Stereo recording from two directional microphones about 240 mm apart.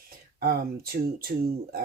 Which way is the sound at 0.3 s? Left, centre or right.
Right.